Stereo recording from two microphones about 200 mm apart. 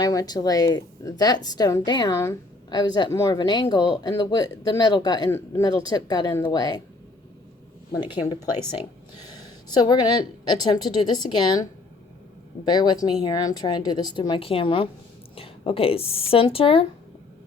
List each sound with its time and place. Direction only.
0.0 s a woman's voice: 20° left (ahead or behind)
7.9 s a woman's voice: 20° left (ahead or behind)
9.6 s a woman's voice: 20° left (ahead or behind)
12.6 s a woman's voice: 20° left (ahead or behind)